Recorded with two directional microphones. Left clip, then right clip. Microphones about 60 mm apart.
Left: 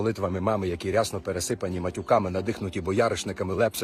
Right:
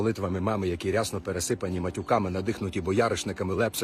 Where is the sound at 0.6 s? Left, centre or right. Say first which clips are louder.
Left 2 dB; right.